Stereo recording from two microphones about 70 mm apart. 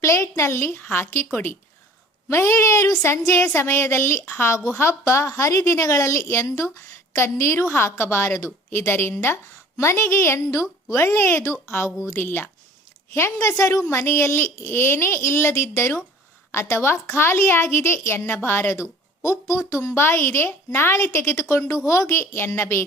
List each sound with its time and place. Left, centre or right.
0.0 s a woman's voice: left
4.5 s a woman's voice: left
13.1 s a woman's voice: left
13.8 s a woman's voice: left